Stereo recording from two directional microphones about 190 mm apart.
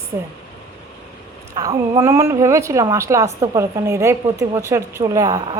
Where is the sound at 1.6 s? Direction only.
15° right (ahead or behind).